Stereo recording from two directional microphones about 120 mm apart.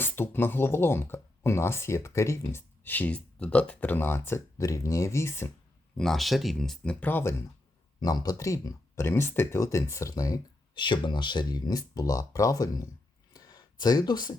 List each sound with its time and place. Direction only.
0.0 s speech: 15° left (ahead or behind)
6.0 s speech: centre (ahead or behind)
7.0 s speech: 20° left (ahead or behind)
7.9 s speech: 35° left (ahead or behind)
13.3 s a sound: 35° left (ahead or behind)